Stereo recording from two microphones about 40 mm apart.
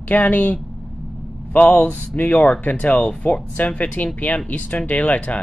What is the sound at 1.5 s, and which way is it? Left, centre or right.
Speech, left.